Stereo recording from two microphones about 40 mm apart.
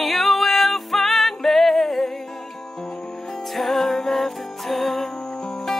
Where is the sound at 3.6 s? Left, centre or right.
Centre.